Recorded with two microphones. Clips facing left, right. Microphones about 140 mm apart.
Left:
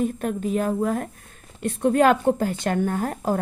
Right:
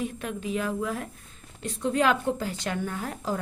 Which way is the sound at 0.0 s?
45° left (ahead or behind).